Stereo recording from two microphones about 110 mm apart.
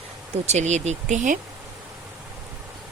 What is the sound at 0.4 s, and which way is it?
Speech, 90° right.